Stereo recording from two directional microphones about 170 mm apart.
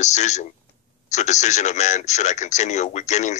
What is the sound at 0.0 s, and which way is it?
A man's voice, 45° left (ahead or behind).